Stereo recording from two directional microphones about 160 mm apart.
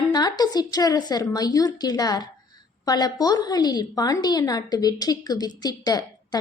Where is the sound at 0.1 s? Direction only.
25° left (ahead or behind).